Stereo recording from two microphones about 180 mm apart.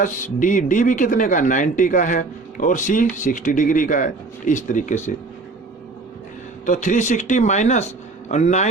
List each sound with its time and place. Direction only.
0.0 s speech: 45° left (ahead or behind)
6.7 s speech: 40° left (ahead or behind)